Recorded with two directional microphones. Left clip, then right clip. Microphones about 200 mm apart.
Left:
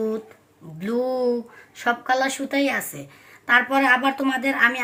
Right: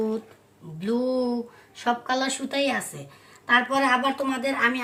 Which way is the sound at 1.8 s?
35° left (ahead or behind).